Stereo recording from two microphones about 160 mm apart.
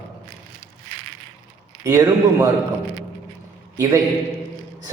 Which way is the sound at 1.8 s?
15° right (ahead or behind).